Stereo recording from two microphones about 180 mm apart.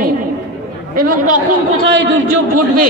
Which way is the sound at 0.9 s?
50° right (ahead or behind).